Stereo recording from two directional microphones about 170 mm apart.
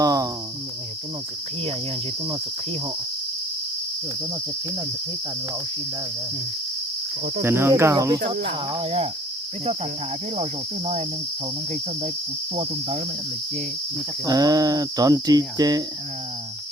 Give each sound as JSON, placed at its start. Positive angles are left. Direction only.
{"t": 0.0, "sound": "cricket", "side_deg": -20}
{"t": 7.4, "sound": "speech", "side_deg": -15}
{"t": 8.7, "sound": "cricket", "side_deg": -35}
{"t": 10.3, "sound": "cricket", "side_deg": -40}
{"t": 14.3, "sound": "cricket", "side_deg": -20}